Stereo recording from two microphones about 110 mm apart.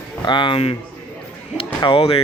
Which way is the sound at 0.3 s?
45° left (ahead or behind).